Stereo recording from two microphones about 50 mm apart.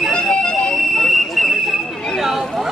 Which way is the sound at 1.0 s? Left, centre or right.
Centre.